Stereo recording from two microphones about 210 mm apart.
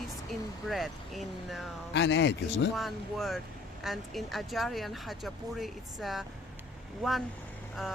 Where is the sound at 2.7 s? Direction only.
Centre (ahead or behind).